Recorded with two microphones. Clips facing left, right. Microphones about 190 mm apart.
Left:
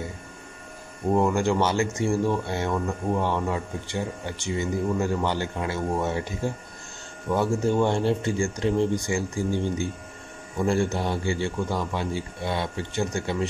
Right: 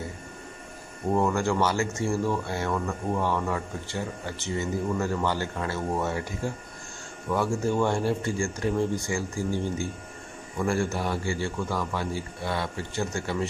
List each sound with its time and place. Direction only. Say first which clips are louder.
1.1 s speech: left 2 dB; 15° left (ahead or behind)
7.2 s a man's voice: left 3 dB; 20° left (ahead or behind)